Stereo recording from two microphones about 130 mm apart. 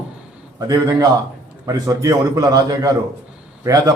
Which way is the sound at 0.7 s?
25° right (ahead or behind).